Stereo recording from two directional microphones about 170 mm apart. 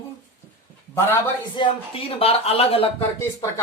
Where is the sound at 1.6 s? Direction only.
35° left (ahead or behind).